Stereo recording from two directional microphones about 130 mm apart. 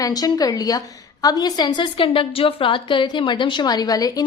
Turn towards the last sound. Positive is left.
turn(degrees=30)  # may be behind; listen again after turning